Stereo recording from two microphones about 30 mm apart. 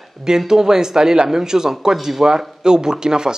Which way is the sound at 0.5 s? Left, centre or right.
Centre.